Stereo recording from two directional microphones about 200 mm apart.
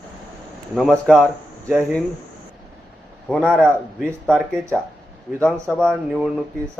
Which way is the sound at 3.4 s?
10° right (ahead or behind).